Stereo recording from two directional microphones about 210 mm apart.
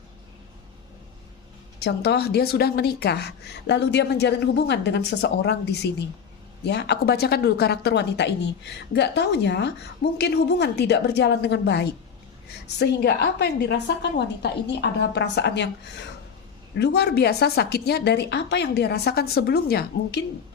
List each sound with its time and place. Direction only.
1.8 s a woman's voice: 50° left (ahead or behind)
16.7 s a woman's voice: 50° left (ahead or behind)